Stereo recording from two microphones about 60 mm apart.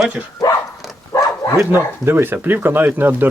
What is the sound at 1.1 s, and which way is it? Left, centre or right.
Bow-wow, left.